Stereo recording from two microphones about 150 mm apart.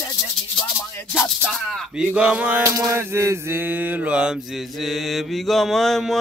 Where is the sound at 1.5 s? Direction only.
Centre (ahead or behind).